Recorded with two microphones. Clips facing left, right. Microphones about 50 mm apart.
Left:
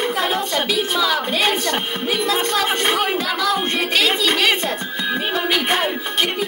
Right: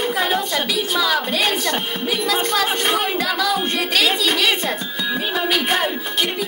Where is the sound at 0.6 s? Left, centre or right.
Left.